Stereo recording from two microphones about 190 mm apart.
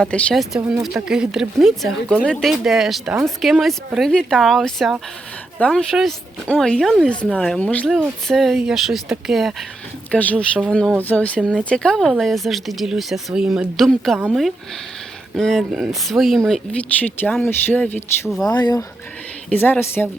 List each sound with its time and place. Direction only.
0.0 s speech: 5° left (ahead or behind)
18.5 s speech: 20° left (ahead or behind)
19.5 s speech: 10° left (ahead or behind)